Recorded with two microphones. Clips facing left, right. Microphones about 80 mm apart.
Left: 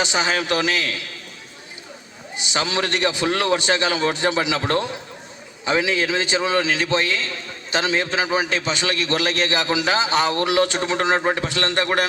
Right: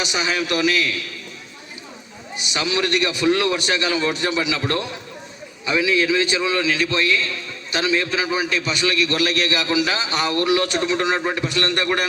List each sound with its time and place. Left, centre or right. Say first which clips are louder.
0.0 s a man's voice: left 2 dB; left
2.5 s a man's voice: right 1 dB; left